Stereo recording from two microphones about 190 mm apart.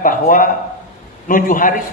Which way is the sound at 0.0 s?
45° left (ahead or behind).